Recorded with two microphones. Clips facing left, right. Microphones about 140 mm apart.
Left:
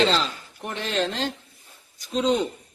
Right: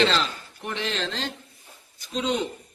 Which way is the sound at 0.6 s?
45° left (ahead or behind).